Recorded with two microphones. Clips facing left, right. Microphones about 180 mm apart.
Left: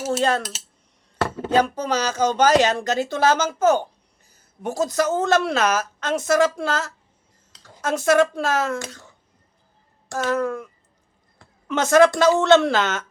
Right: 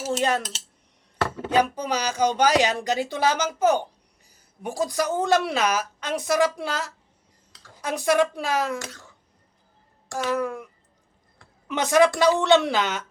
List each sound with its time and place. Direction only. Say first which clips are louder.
0.2 s a woman's voice: left 2 dB; 15° right (ahead or behind)
1.5 s a woman's voice: left 2 dB; 15° right (ahead or behind)
10.1 s a woman's voice: left 3 dB; 15° right (ahead or behind)
11.7 s a woman's voice: left 4 dB; 15° right (ahead or behind)